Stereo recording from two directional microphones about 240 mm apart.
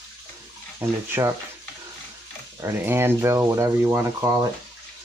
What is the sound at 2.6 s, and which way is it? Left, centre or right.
Speech, centre.